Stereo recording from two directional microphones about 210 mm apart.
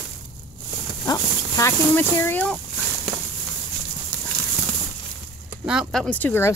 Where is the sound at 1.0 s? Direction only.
15° left (ahead or behind).